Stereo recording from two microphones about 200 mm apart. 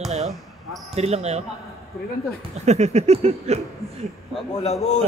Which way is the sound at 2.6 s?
35° right (ahead or behind).